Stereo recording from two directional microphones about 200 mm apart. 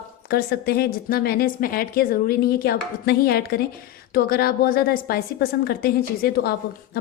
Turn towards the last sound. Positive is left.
turn(degrees=50)  # may be behind; listen again after turning